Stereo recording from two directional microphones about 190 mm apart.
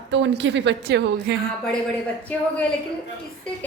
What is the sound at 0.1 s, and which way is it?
A woman's voice, 70° right (ahead or behind).